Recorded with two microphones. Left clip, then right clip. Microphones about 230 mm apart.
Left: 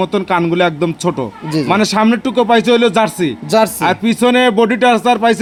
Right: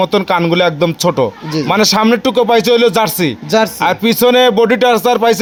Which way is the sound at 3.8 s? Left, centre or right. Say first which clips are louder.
Right 2 dB; right.